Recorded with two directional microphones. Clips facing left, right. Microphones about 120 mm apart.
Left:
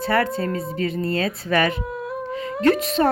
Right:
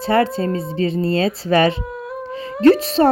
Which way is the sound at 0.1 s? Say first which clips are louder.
Right 5 dB; 25° right (ahead or behind).